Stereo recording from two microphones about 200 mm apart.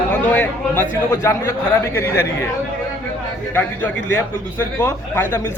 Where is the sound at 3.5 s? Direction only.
10° left (ahead or behind).